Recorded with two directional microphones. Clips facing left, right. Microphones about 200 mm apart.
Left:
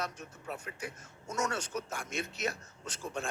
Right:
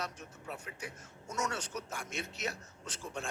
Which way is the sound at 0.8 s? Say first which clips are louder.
Left 3 dB; 45° left (ahead or behind).